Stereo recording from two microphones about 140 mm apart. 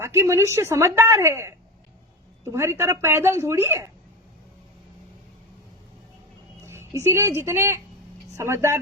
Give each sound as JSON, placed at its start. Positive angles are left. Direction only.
{"t": 0.0, "sound": "a woman's voice", "side_deg": -20}
{"t": 6.7, "sound": "a woman's voice", "side_deg": -20}